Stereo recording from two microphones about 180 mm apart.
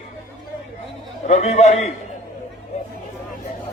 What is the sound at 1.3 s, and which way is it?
Speech, 40° left (ahead or behind).